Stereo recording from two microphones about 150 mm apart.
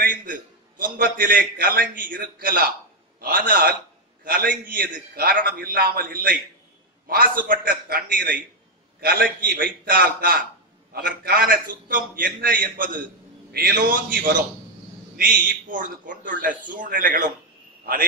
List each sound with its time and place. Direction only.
0.0 s a man's voice: 65° right (ahead or behind); by 6.2 s 85° right
7.1 s a man's voice: 70° right (ahead or behind)
9.0 s a man's voice: 90° right; by 13.0 s 65° right (ahead or behind)
13.5 s a man's voice: 90° right
14.1 s a man's voice: 70° right (ahead or behind)